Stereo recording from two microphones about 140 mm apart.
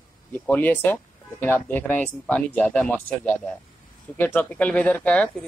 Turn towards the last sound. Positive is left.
turn(degrees=10)  # may be behind; listen again after turning